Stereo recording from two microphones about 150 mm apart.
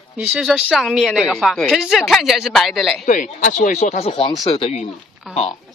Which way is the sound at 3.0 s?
60° left (ahead or behind).